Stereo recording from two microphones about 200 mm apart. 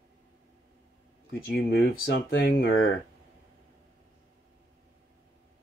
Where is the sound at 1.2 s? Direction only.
55° left (ahead or behind); by 2.5 s 70° left (ahead or behind).